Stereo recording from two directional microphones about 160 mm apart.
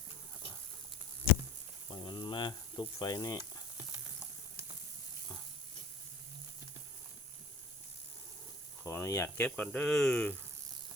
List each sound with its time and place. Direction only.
1.9 s frying: 25° left (ahead or behind)
8.8 s snake: 20° left (ahead or behind)
9.4 s speech: 5° left (ahead or behind)